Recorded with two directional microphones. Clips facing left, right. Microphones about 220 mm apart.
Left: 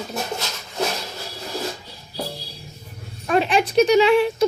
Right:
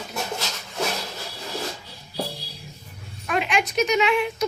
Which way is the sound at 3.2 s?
35° left (ahead or behind).